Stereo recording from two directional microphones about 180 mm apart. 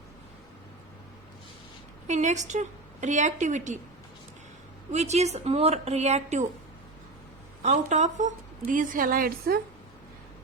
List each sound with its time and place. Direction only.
2.0 s a woman's voice: 40° right (ahead or behind)
4.9 s a woman's voice: 40° right (ahead or behind)
7.6 s a woman's voice: 40° right (ahead or behind)